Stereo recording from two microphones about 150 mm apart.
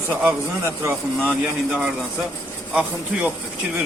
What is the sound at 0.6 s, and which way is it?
Speech, 15° right (ahead or behind).